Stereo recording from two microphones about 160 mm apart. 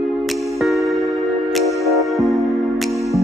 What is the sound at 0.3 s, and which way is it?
Music, centre (ahead or behind).